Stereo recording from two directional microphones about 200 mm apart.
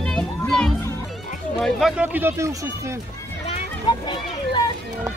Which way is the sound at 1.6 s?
Centre (ahead or behind).